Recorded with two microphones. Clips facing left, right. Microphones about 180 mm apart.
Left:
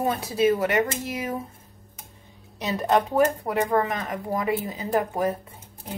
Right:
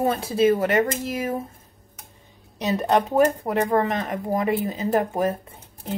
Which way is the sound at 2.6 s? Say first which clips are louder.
Right 2 dB; 20° right (ahead or behind).